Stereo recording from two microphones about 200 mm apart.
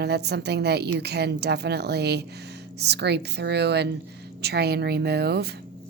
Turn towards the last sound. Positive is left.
turn(degrees=-55)  # may be behind; listen again after turning